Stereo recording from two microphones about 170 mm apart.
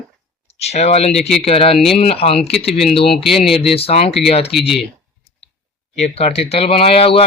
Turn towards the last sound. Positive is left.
turn(degrees=35)  # may be behind; listen again after turning